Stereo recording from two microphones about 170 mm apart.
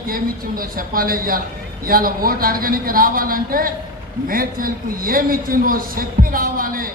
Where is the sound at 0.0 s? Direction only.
55° right (ahead or behind).